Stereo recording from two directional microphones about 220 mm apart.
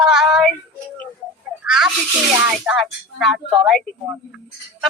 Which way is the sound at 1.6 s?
5° right (ahead or behind).